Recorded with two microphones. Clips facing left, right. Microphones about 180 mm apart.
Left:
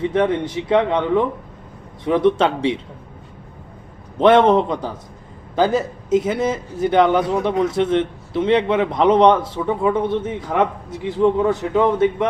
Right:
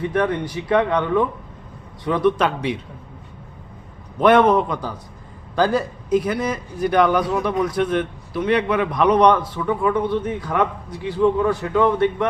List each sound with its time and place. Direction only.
0.1 s a man's voice: 25° left (ahead or behind)
4.2 s a man's voice: 25° left (ahead or behind)